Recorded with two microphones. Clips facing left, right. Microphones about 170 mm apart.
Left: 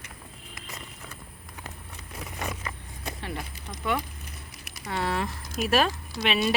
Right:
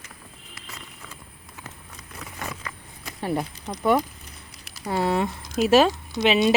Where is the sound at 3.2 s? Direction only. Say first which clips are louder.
Right 14 dB; 40° right (ahead or behind).